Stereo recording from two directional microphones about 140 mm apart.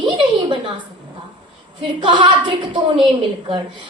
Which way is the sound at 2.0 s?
35° right (ahead or behind).